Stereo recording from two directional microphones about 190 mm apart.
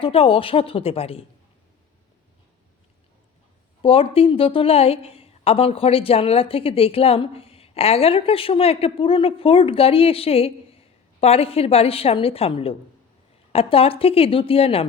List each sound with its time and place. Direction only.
0.0 s a woman's voice: 30° left (ahead or behind)
3.8 s a woman's voice: 30° left (ahead or behind)